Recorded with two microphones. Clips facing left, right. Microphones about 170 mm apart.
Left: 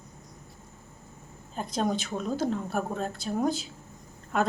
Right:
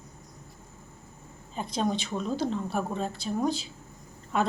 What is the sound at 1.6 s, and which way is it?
Speech, centre (ahead or behind).